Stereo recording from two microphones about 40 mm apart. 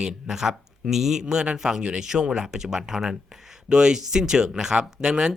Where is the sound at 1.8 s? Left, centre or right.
Right.